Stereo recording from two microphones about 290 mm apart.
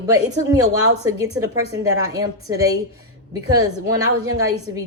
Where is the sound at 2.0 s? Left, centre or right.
Centre.